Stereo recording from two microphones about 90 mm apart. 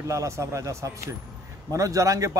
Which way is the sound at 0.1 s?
35° right (ahead or behind).